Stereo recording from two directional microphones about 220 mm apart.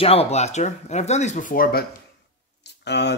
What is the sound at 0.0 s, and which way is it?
Speech, 25° left (ahead or behind).